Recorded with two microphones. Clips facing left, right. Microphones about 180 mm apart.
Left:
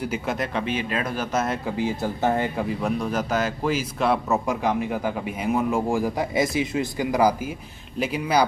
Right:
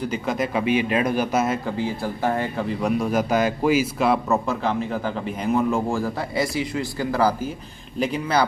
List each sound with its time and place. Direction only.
0.0 s speech: 5° left (ahead or behind)
0.7 s a man's voice: 15° right (ahead or behind)
1.8 s speech: 20° left (ahead or behind)
2.8 s a man's voice: 10° right (ahead or behind)
4.0 s speech: centre (ahead or behind)
4.5 s a man's voice: 15° left (ahead or behind)